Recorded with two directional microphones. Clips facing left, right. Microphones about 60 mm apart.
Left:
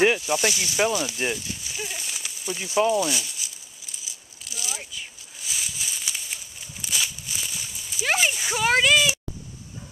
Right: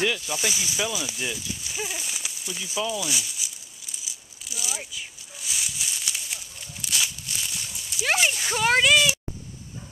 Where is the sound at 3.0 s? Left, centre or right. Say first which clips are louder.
Left 3 dB; centre.